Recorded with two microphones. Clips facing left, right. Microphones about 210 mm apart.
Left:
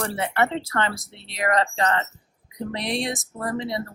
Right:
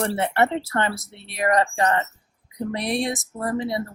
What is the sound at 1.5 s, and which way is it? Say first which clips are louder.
Speech: right 2 dB; 15° right (ahead or behind).